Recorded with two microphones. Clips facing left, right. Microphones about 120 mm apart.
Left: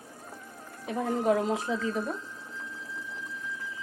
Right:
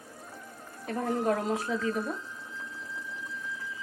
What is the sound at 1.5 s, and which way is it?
Speech, 20° left (ahead or behind).